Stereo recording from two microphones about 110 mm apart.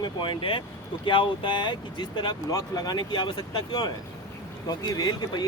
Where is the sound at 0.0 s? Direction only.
50° left (ahead or behind).